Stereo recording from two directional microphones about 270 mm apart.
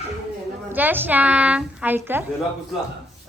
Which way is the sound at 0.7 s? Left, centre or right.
Centre.